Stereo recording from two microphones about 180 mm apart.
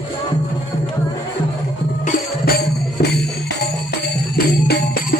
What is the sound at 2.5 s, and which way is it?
Music, 65° left (ahead or behind).